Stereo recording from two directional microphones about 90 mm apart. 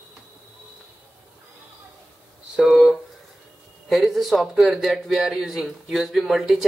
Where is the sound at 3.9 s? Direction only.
Centre (ahead or behind).